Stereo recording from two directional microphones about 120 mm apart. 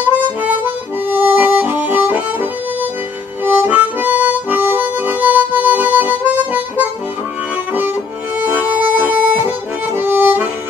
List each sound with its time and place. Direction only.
1.1 s music: 15° right (ahead or behind)
3.4 s harmonica: 15° right (ahead or behind)
8.5 s music: 15° right (ahead or behind)